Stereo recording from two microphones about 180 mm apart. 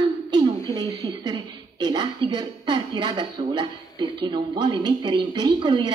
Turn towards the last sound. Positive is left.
turn(degrees=-25)  # may be behind; listen again after turning